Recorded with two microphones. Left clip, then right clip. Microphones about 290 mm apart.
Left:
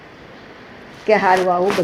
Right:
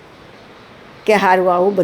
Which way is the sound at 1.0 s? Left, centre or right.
Right.